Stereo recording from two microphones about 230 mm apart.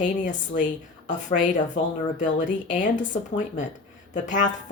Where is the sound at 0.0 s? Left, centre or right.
Left.